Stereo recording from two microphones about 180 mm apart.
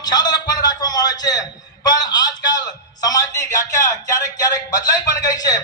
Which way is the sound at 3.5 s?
20° left (ahead or behind).